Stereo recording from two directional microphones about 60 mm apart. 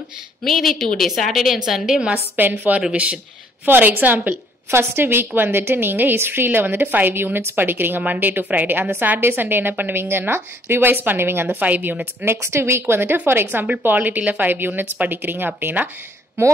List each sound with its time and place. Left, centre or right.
0.4 s a woman's voice: centre
2.3 s a woman's voice: right
2.9 s a woman's voice: right
3.6 s a woman's voice: right
4.6 s a woman's voice: right
11.6 s a woman's voice: right
12.3 s a woman's voice: right